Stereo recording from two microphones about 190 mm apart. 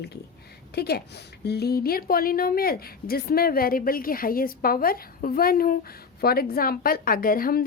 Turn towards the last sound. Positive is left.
turn(degrees=50)  # may be behind; listen again after turning